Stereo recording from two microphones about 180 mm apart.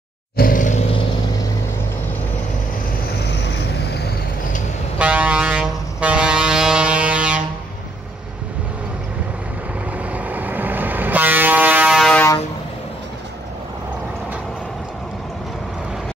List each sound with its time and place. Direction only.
0.4 s roar: 45° left (ahead or behind)
4.9 s vehicle: 5° right (ahead or behind)
9.9 s vehicle: 10° right (ahead or behind)